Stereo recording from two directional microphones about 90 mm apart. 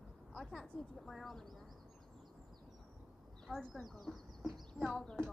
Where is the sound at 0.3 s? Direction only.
5° left (ahead or behind).